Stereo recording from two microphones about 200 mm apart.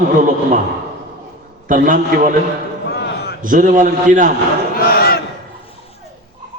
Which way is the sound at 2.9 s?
55° left (ahead or behind).